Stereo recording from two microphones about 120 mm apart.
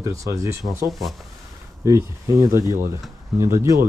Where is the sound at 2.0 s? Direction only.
25° right (ahead or behind).